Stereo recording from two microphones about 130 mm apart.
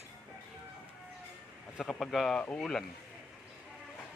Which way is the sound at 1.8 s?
Centre (ahead or behind).